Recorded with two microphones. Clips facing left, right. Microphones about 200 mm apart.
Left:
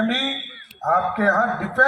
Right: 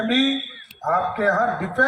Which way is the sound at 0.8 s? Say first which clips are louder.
Left 1 dB; 55° left (ahead or behind).